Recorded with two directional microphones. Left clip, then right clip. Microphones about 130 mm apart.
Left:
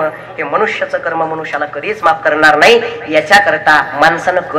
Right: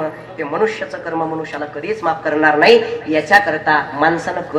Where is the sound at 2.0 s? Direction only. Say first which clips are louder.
Left 6 dB; 30° left (ahead or behind).